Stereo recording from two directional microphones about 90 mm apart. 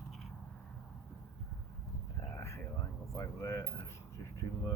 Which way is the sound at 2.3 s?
30° left (ahead or behind).